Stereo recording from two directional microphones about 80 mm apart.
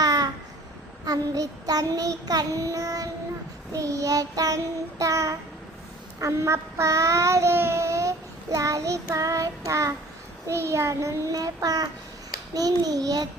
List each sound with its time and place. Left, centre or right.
0.0 s babbling: right
1.0 s child singing: right
10.4 s a child's voice: right
11.3 s child singing: right